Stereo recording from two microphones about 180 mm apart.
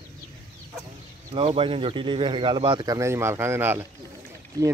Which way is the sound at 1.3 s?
30° right (ahead or behind).